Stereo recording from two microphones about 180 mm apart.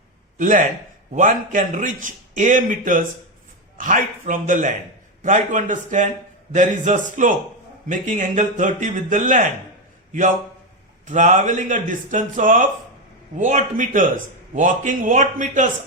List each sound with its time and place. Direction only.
0.3 s a man's voice: 45° right (ahead or behind)